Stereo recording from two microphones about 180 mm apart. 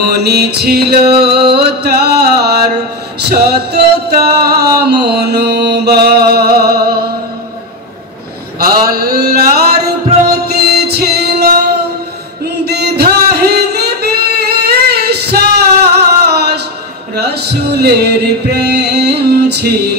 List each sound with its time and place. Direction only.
0.0 s music: 65° right (ahead or behind)
8.9 s a sound: 60° right (ahead or behind)
10.4 s music: 60° right (ahead or behind)
12.6 s singing: 65° right (ahead or behind)
17.1 s music: 65° right (ahead or behind)